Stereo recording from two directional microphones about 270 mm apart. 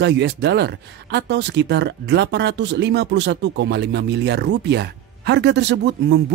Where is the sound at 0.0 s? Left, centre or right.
Right.